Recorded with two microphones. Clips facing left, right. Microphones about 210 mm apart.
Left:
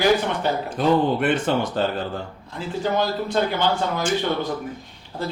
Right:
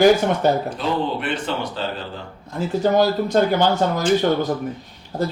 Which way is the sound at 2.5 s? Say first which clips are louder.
Right 6 dB; 40° right (ahead or behind).